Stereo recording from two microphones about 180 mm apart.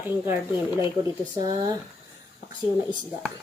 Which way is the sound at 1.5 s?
20° right (ahead or behind).